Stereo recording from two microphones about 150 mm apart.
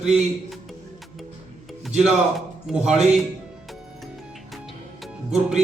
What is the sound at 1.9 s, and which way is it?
Speech, 5° right (ahead or behind).